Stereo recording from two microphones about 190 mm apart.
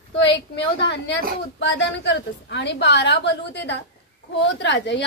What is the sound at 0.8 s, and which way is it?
A woman's voice, 65° left (ahead or behind).